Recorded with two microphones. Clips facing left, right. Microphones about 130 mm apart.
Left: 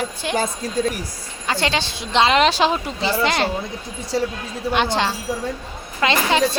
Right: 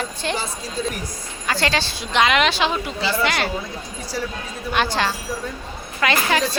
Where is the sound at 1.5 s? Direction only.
20° left (ahead or behind).